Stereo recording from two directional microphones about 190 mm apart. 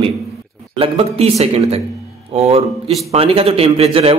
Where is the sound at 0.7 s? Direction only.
30° right (ahead or behind).